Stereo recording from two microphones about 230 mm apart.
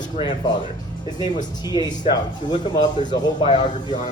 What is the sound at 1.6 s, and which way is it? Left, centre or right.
Speech, centre.